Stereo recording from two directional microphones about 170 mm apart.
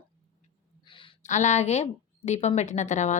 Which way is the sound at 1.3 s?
45° left (ahead or behind).